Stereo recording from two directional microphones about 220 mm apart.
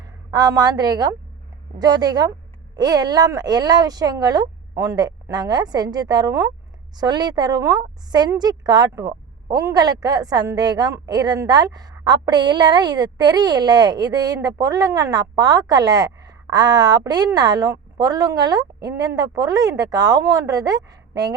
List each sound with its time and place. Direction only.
0.3 s a woman's voice: 20° right (ahead or behind)